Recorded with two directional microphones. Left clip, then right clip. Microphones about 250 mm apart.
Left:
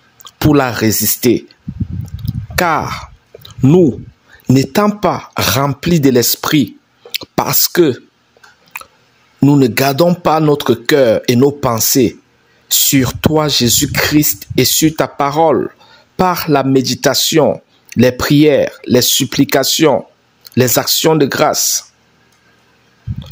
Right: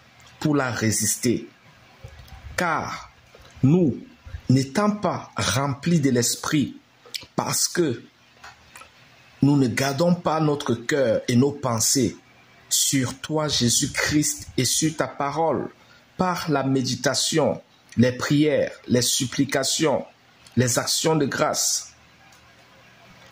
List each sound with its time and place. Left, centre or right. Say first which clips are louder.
0.4 s speech: left 11 dB; left
2.5 s speech: left 10 dB; left
4.5 s speech: left 10 dB; left
9.4 s speech: left 10 dB; left